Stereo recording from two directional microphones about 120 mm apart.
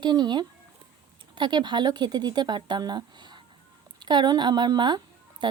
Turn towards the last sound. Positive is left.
turn(degrees=-40)  # may be behind; listen again after turning